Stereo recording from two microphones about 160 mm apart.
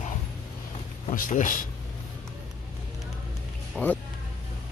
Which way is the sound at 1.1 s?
55° left (ahead or behind).